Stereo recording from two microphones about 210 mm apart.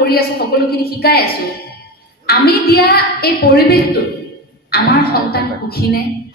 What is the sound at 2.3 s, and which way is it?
A woman's voice, 45° left (ahead or behind).